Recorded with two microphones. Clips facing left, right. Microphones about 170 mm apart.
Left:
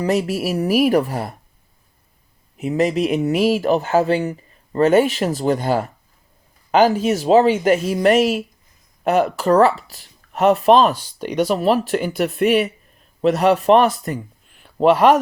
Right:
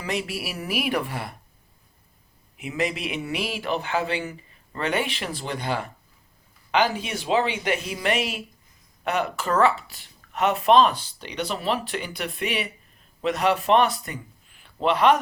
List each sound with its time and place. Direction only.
0.0 s speech: 40° left (ahead or behind)
2.6 s speech: 40° left (ahead or behind)